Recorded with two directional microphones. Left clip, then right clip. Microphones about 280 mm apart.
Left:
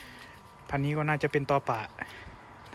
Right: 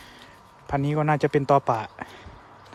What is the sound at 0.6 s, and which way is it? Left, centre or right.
Speech, right.